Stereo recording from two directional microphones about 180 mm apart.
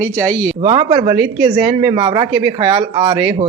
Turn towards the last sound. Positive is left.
turn(degrees=-25)  # may be behind; listen again after turning